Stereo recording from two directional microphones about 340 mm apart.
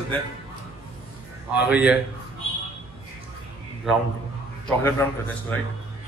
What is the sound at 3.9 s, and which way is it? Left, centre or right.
A man's voice, centre.